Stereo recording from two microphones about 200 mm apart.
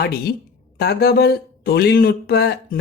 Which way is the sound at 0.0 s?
50° left (ahead or behind).